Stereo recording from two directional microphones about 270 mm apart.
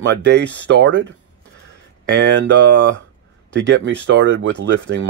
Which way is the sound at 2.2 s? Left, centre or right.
Right.